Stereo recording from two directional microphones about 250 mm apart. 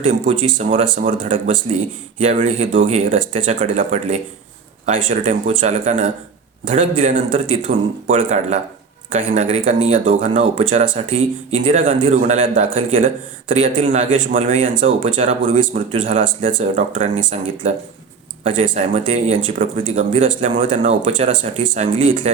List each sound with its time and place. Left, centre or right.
0.0 s speech: right